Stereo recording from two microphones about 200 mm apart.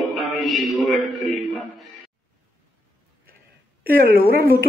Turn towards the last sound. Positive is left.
turn(degrees=-50)  # may be behind; listen again after turning